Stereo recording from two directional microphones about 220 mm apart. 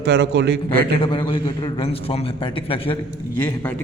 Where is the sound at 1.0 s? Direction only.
20° left (ahead or behind).